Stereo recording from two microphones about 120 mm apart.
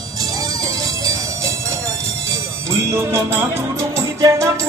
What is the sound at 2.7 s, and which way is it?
Music, 20° right (ahead or behind).